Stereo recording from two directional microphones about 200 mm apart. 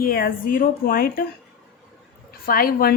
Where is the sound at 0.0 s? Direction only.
45° left (ahead or behind).